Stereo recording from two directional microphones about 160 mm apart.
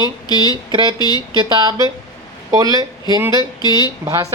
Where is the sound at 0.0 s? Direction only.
25° left (ahead or behind).